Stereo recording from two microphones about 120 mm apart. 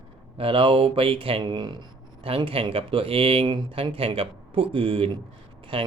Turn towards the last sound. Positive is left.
turn(degrees=-45)  # may be behind; listen again after turning